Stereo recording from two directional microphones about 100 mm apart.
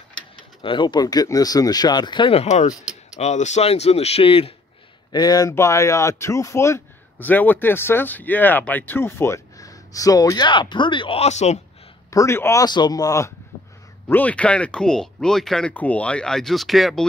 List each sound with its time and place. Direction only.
0.1 s speech: 55° left (ahead or behind)
2.3 s speech: 90° left
2.7 s speech: 10° right (ahead or behind)
3.2 s speech: 90° left; by 4.6 s 65° left (ahead or behind)
5.1 s speech: 40° left (ahead or behind)
5.5 s a man's voice: 30° left (ahead or behind); by 11.1 s 55° left (ahead or behind)
11.1 s speech: 90° left
12.1 s speech: 30° left (ahead or behind)
12.6 s speech: 45° left (ahead or behind)
14.0 s speech: 15° left (ahead or behind)
15.7 s speech: 15° left (ahead or behind)